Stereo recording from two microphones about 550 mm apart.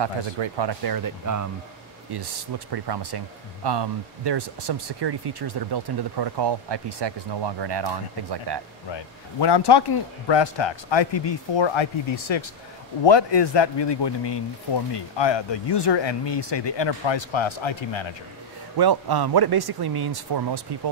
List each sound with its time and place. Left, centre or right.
0.0 s speech: right
2.1 s speech: right
8.9 s speech: left
18.8 s speech: right